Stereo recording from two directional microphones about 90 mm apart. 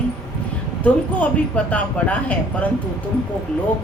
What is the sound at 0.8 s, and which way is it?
Speech, 15° left (ahead or behind).